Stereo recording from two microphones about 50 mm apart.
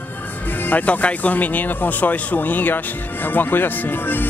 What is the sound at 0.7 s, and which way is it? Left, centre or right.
Speech, left.